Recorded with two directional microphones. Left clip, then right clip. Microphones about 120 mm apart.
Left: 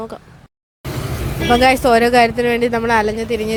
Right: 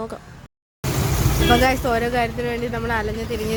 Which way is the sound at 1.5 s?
30° left (ahead or behind).